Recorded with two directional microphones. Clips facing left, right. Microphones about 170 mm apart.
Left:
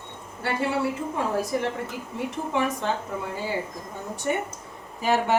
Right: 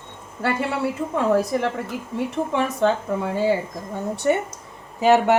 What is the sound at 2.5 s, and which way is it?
Speech, 65° right (ahead or behind).